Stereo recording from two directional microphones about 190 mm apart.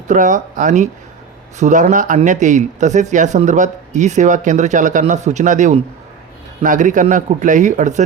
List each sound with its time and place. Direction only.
0.1 s speech: 45° right (ahead or behind)